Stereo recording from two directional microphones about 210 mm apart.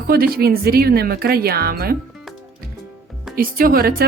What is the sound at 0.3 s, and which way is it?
Speech, 45° right (ahead or behind).